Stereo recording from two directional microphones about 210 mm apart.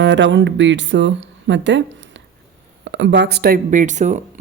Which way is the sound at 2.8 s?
60° right (ahead or behind).